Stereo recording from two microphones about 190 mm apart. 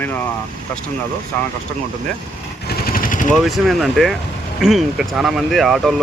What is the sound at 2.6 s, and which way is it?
Vehicle, 50° left (ahead or behind).